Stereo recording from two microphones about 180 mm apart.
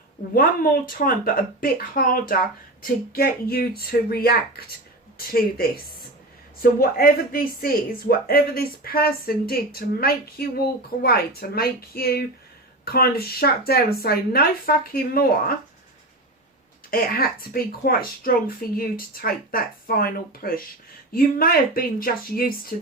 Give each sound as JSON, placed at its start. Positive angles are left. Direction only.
{"t": 0.3, "sound": "speech", "side_deg": 55}
{"t": 16.9, "sound": "speech", "side_deg": 55}